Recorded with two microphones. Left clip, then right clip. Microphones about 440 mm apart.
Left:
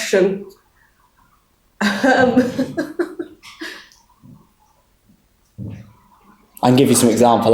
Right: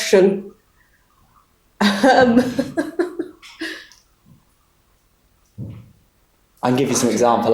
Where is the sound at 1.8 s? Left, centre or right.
Right.